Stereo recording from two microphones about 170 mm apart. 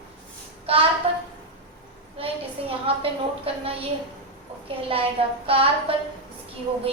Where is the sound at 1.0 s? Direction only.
35° right (ahead or behind).